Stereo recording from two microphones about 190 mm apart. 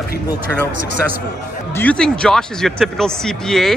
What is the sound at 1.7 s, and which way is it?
Speech, 10° left (ahead or behind).